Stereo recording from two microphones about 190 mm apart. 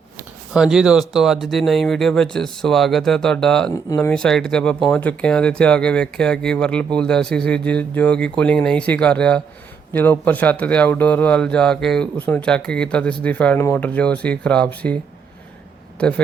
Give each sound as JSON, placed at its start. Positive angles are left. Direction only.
{"t": 0.2, "sound": "speech", "side_deg": -5}
{"t": 16.0, "sound": "a man's voice", "side_deg": 5}